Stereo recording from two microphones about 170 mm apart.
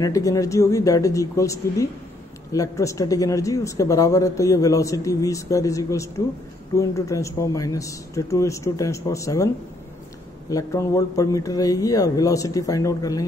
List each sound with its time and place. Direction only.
0.0 s speech: 20° left (ahead or behind)
10.5 s speech: 20° left (ahead or behind)